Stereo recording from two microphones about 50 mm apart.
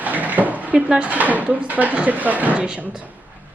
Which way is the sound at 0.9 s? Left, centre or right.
Right.